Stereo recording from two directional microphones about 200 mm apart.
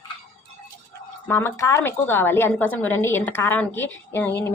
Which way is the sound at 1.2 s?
10° left (ahead or behind).